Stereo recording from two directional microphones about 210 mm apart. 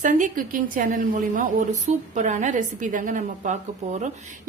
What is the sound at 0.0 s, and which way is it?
A woman's voice, 40° right (ahead or behind).